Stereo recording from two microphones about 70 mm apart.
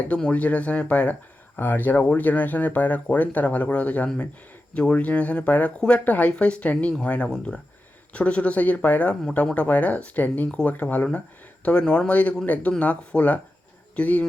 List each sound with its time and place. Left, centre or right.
0.1 s speech: centre